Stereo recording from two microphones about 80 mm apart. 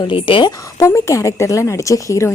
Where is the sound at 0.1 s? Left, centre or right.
Left.